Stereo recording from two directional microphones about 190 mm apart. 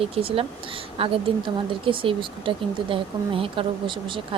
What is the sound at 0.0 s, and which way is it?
Speech, 30° right (ahead or behind).